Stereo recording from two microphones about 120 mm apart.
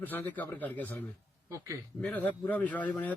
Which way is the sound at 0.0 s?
15° left (ahead or behind).